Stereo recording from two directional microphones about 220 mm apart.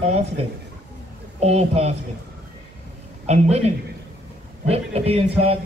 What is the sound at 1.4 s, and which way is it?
Speech, 30° right (ahead or behind).